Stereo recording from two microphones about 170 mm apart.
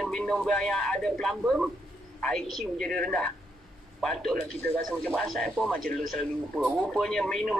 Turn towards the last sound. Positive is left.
turn(degrees=5)  # may be behind; listen again after turning